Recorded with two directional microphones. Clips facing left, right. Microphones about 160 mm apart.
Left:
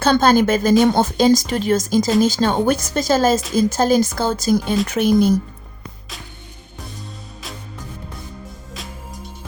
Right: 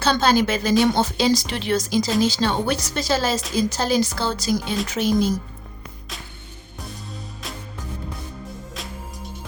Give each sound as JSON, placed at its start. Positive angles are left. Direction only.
{"t": 0.0, "sound": "a woman's voice", "side_deg": 50}
{"t": 7.4, "sound": "music", "side_deg": 0}